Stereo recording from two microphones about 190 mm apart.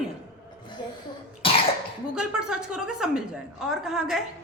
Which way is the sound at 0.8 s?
25° left (ahead or behind).